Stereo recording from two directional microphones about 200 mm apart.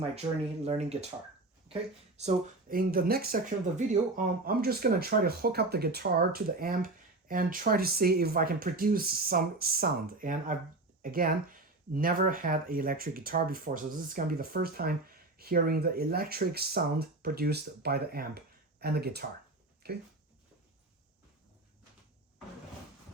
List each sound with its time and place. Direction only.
0.2 s speech: 20° right (ahead or behind)
0.6 s speech: 35° right (ahead or behind)
2.2 s speech: 45° right (ahead or behind)